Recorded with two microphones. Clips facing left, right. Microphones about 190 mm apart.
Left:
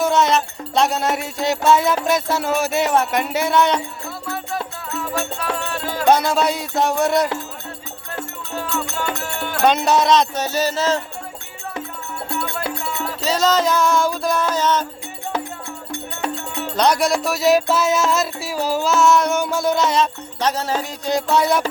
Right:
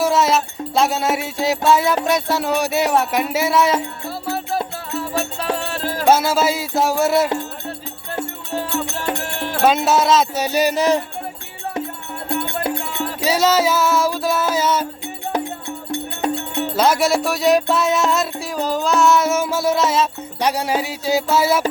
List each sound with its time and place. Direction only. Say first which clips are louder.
0.0 s music: even; centre (ahead or behind)
4.5 s music: right 3 dB; 30° right (ahead or behind)
6.1 s music: right 1 dB; 5° right (ahead or behind)
9.6 s music: even; centre (ahead or behind)
12.3 s music: right 4 dB; 25° right (ahead or behind)
13.2 s music: right 1 dB; 10° right (ahead or behind)
16.7 s music: right 1 dB; 5° right (ahead or behind)